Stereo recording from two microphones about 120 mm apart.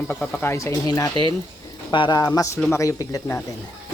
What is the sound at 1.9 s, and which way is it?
Speech, 40° left (ahead or behind).